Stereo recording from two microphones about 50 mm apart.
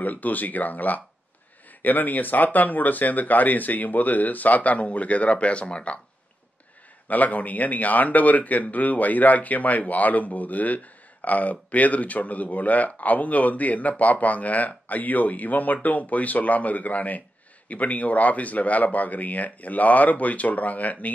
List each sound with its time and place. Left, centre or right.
0.0 s speech: left
7.1 s speech: left